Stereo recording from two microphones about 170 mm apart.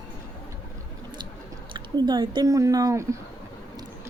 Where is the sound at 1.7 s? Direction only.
25° right (ahead or behind).